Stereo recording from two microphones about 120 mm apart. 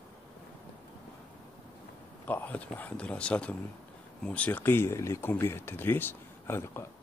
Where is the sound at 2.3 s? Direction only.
15° left (ahead or behind).